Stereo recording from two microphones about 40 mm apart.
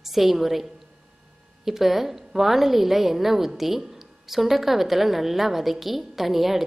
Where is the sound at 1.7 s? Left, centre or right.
Centre.